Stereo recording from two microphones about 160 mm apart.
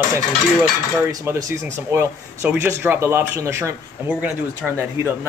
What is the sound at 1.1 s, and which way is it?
Speech, 20° right (ahead or behind).